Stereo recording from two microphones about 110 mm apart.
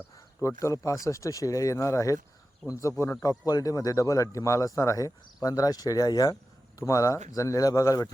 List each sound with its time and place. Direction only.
0.3 s speech: 25° left (ahead or behind)
3.2 s a man's voice: 35° left (ahead or behind)